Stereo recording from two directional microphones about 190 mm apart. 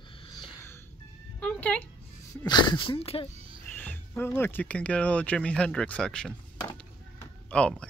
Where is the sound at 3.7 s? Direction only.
10° left (ahead or behind).